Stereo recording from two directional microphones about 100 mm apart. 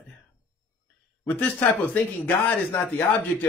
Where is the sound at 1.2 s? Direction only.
15° left (ahead or behind).